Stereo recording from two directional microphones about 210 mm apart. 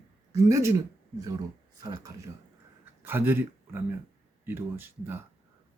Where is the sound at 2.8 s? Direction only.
10° right (ahead or behind).